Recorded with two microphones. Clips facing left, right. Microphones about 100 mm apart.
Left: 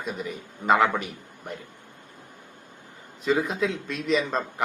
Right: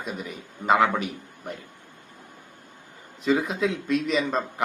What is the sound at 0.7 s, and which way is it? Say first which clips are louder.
Speech: even; centre (ahead or behind).